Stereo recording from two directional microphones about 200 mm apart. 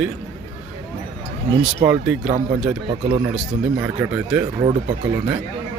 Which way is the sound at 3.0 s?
25° right (ahead or behind).